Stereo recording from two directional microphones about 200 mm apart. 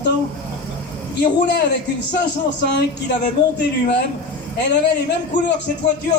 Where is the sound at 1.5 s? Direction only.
60° left (ahead or behind).